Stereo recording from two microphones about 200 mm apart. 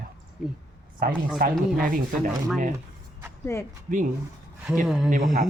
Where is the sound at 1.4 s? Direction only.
45° right (ahead or behind).